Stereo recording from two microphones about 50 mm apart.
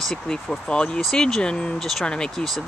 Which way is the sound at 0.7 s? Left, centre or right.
Centre.